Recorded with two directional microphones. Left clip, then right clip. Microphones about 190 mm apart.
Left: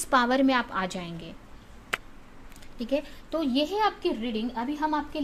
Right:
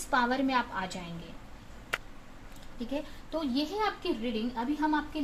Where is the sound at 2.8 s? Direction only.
60° left (ahead or behind).